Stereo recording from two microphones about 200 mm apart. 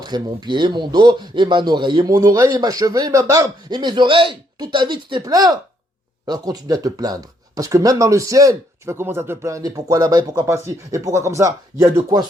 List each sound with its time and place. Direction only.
0.0 s speech: 20° right (ahead or behind)